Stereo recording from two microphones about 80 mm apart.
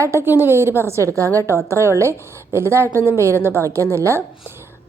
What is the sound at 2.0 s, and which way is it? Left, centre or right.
Speech, right.